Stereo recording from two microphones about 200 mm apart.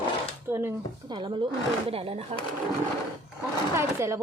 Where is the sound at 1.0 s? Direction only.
25° right (ahead or behind).